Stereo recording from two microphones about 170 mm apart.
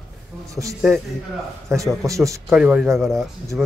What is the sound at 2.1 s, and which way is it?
Speech, 20° right (ahead or behind).